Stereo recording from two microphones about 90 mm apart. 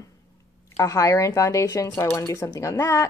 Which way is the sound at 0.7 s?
35° left (ahead or behind).